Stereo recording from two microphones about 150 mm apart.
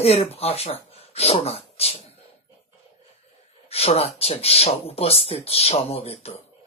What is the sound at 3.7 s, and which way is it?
A man's voice, 40° left (ahead or behind).